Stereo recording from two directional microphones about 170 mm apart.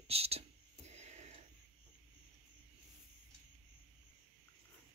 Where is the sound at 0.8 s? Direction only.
40° right (ahead or behind).